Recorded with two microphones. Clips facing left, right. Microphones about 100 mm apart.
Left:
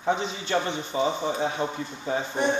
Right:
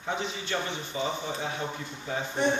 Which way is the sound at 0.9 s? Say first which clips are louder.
Left 7 dB; 30° left (ahead or behind).